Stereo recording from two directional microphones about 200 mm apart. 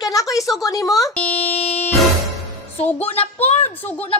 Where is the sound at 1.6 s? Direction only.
30° left (ahead or behind).